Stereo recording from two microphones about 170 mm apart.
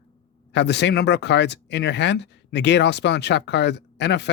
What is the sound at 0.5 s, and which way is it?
Speech, 90° left.